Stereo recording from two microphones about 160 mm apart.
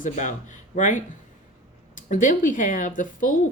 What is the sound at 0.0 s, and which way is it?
Speech, 50° left (ahead or behind).